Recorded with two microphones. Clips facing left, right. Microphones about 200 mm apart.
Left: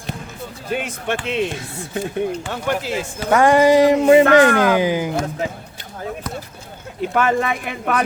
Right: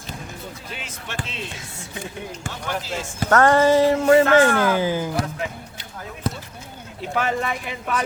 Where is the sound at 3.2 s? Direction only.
10° left (ahead or behind).